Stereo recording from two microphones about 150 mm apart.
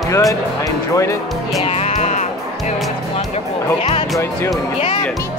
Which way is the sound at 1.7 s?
45° left (ahead or behind).